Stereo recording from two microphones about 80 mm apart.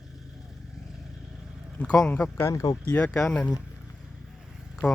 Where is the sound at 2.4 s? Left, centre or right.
Left.